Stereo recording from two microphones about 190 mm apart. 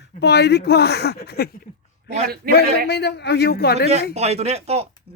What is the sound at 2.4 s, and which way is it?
Speech, 50° right (ahead or behind).